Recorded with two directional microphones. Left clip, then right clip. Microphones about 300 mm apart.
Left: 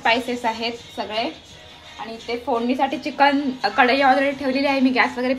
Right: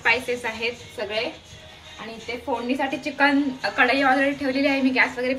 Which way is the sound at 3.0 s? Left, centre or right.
Left.